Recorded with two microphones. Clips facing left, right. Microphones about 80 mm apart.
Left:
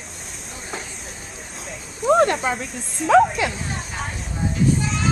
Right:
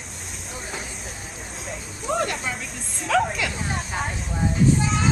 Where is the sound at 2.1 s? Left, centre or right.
Left.